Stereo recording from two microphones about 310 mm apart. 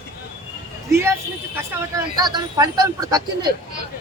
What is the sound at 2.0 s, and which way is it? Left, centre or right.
Speech, centre.